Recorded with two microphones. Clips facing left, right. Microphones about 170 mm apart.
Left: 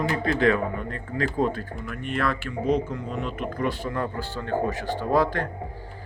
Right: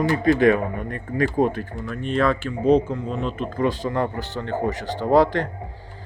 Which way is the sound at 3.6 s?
90° right.